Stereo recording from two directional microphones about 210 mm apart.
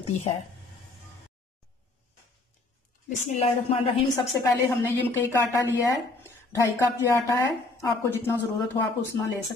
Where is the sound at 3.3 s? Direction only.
30° left (ahead or behind).